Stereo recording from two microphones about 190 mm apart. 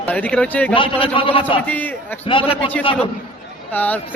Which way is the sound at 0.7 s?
30° left (ahead or behind).